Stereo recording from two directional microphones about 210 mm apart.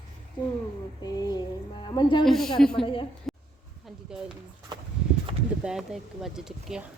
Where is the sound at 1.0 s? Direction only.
20° left (ahead or behind).